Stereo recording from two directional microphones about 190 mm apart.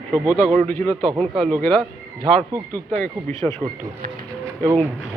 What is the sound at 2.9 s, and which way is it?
Speech, 10° left (ahead or behind).